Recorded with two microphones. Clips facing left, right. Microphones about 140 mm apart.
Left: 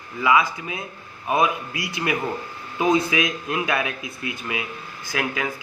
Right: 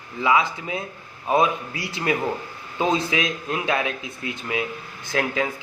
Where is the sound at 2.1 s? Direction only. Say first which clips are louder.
Right 4 dB; 30° right (ahead or behind).